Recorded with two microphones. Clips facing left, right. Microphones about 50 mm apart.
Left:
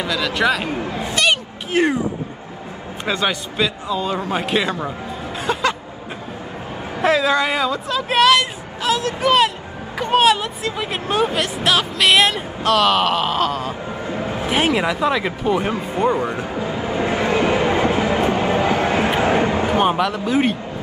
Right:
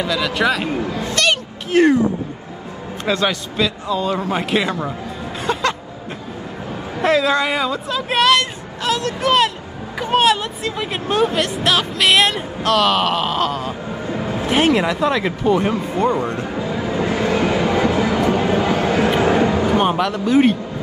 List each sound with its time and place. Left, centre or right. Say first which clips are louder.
0.0 s speech: right 1 dB; centre
1.0 s speech: left 1 dB; centre
3.1 s speech: right 2 dB; centre
5.5 s music: even; centre
7.0 s speech: even; centre
15.7 s speech: right 1 dB; left
16.5 s train: right 1 dB; left
19.8 s speech: even; centre